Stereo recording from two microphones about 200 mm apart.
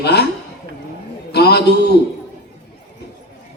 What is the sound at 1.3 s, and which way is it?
Speech, 55° left (ahead or behind).